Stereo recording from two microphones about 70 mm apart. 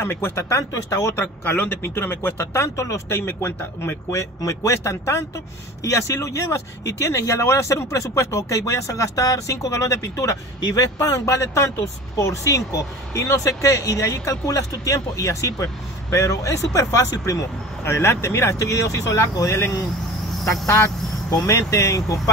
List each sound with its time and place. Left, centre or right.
0.0 s speech: left
1.1 s speech: left
17.8 s speech: left
21.3 s speech: left
21.5 s speech: left